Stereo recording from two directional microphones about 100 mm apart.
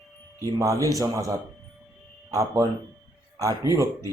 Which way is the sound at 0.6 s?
35° right (ahead or behind).